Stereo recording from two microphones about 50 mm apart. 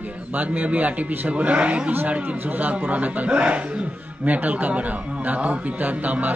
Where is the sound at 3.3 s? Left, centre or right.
Right.